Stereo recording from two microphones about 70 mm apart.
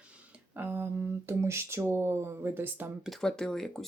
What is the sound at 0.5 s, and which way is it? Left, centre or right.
Speech, right.